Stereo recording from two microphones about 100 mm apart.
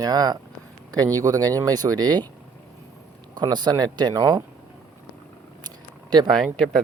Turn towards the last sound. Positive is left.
turn(degrees=5)  # may be behind; listen again after turning